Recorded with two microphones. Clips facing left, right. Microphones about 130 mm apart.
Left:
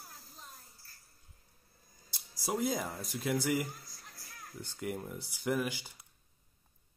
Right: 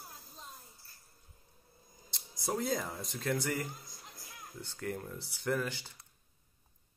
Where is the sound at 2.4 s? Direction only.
10° left (ahead or behind).